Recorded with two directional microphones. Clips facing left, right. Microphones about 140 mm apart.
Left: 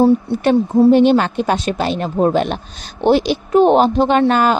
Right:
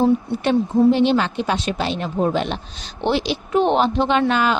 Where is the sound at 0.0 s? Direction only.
40° left (ahead or behind).